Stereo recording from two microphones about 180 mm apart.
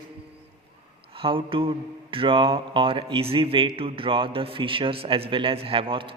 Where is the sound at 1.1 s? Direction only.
30° right (ahead or behind).